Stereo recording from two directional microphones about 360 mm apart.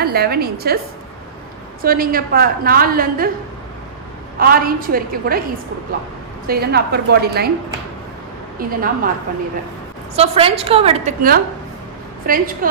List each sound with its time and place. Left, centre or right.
0.0 s a woman's voice: right
1.8 s a woman's voice: right
4.4 s a woman's voice: right
6.4 s a woman's voice: right
8.5 s a woman's voice: right
10.1 s a woman's voice: centre